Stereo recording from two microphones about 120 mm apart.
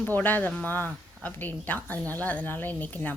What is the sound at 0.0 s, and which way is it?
A woman's voice, 15° left (ahead or behind).